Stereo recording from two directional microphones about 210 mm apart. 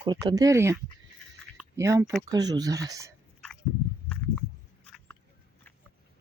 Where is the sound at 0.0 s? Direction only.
20° right (ahead or behind).